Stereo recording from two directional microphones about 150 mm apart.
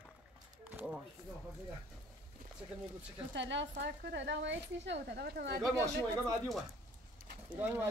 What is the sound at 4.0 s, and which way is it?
A woman's voice, 90° right.